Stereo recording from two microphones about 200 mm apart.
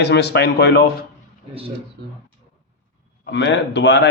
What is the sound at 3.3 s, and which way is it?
Speech, 65° left (ahead or behind).